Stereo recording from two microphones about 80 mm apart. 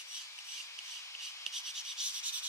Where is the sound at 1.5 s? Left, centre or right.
Centre.